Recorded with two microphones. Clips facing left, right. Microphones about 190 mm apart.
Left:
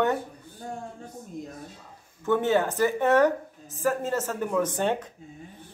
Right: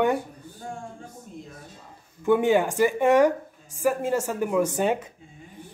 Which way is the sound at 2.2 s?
10° right (ahead or behind).